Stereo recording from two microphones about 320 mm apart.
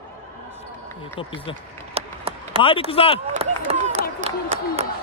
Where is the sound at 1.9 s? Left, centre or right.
Centre.